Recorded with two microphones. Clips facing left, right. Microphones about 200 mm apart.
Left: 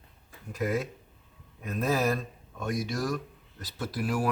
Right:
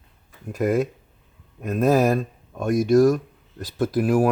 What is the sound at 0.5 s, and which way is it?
Speech, 45° right (ahead or behind).